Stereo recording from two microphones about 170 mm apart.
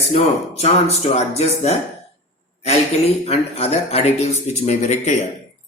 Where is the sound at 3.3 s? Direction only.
40° left (ahead or behind).